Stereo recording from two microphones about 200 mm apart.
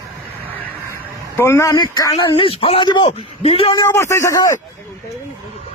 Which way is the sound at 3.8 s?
15° left (ahead or behind).